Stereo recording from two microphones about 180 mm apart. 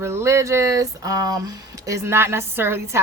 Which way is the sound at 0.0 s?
15° right (ahead or behind).